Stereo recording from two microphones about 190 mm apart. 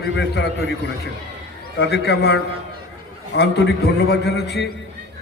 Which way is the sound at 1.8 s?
60° left (ahead or behind).